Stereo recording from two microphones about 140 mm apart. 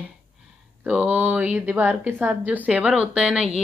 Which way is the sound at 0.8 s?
10° right (ahead or behind).